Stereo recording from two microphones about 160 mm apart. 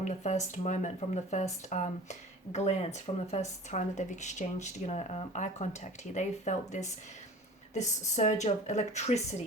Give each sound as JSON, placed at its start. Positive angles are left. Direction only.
{"t": 0.0, "sound": "speech", "side_deg": 45}